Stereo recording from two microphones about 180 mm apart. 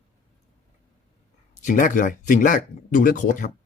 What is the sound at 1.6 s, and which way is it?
Speech, 45° left (ahead or behind).